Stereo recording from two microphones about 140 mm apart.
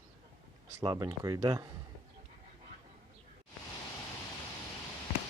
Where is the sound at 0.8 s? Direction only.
25° right (ahead or behind).